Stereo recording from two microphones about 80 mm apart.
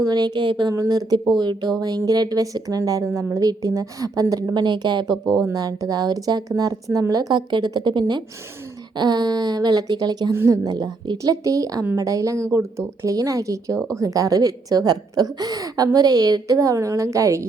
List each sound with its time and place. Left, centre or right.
0.0 s speech: right
0.7 s a woman's voice: right
1.3 s a woman's voice: right
4.5 s a woman's voice: right
5.1 s speech: centre
5.5 s a woman's voice: right
11.2 s a woman's voice: right